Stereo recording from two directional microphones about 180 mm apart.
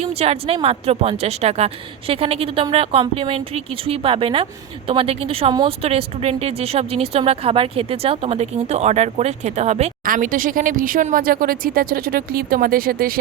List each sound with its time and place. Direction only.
0.0 s a woman's voice: 35° right (ahead or behind)
10.0 s speech: 50° right (ahead or behind)